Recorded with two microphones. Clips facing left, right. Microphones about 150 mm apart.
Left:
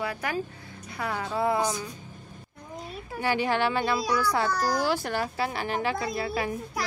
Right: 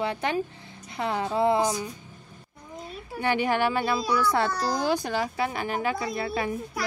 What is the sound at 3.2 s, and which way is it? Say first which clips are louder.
Speech: right 1 dB; 20° right (ahead or behind).